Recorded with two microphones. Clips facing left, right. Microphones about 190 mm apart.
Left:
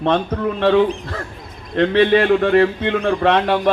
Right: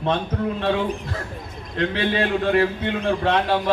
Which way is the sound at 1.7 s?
65° left (ahead or behind).